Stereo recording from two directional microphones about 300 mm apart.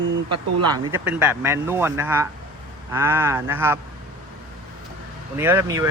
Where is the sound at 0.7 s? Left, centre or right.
Centre.